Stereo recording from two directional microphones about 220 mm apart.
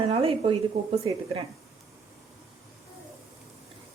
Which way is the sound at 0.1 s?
25° right (ahead or behind).